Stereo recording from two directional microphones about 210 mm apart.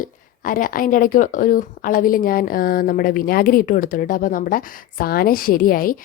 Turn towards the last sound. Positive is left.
turn(degrees=45)  # may be behind; listen again after turning